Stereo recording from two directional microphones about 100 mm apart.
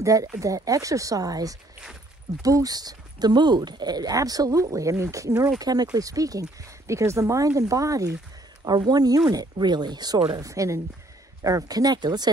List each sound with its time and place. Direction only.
0.0 s speech: 35° right (ahead or behind)
10.4 s speech: 30° right (ahead or behind)